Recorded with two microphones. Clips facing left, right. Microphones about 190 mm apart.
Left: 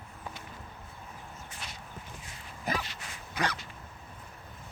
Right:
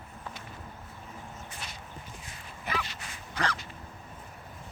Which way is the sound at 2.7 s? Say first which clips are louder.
Left 1 dB; 40° left (ahead or behind).